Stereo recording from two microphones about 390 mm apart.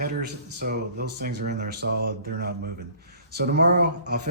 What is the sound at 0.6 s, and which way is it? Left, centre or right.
A man's voice, right.